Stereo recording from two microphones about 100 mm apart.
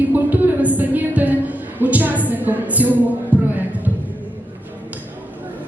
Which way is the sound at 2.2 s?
15° right (ahead or behind).